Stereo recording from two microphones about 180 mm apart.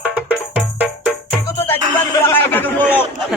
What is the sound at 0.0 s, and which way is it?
Music, 5° right (ahead or behind).